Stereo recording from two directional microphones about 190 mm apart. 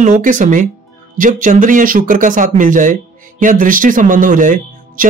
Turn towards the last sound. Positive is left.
turn(degrees=-45)  # may be behind; listen again after turning